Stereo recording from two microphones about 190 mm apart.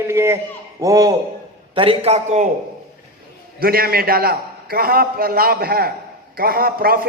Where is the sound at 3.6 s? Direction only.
50° right (ahead or behind).